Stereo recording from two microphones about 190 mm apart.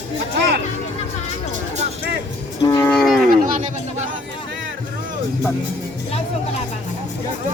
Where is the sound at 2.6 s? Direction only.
15° left (ahead or behind).